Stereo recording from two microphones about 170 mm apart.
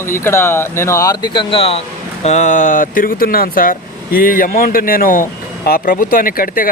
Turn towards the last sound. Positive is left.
turn(degrees=55)  # may be behind; listen again after turning